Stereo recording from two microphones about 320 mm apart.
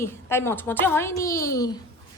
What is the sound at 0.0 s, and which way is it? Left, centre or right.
Speech, centre.